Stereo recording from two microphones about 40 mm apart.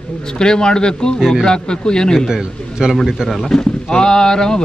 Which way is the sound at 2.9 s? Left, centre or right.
Centre.